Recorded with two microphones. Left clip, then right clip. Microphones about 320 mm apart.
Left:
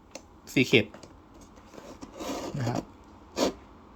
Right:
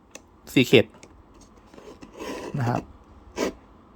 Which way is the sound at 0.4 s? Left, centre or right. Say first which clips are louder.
Right 5 dB; centre.